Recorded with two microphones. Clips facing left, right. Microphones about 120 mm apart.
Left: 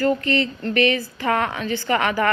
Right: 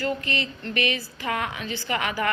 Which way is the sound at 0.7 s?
55° left (ahead or behind).